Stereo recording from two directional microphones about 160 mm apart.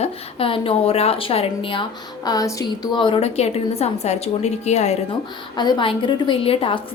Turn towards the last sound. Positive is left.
turn(degrees=35)  # may be behind; listen again after turning